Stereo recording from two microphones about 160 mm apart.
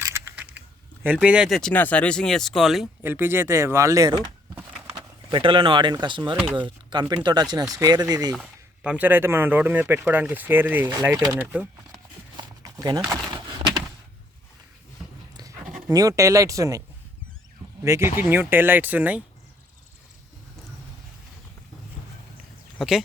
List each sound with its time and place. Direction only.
0.0 s a sound: 15° right (ahead or behind)
1.0 s speech: 10° right (ahead or behind)
3.0 s speech: 15° right (ahead or behind); by 6.3 s 30° right (ahead or behind)
6.4 s speech: 10° right (ahead or behind)
7.0 s speech: 25° right (ahead or behind)
8.3 s speech: 5° right (ahead or behind)
12.4 s a sound: 20° right (ahead or behind)
15.9 s speech: 20° right (ahead or behind)
17.8 s speech: 15° right (ahead or behind)
22.8 s speech: centre (ahead or behind)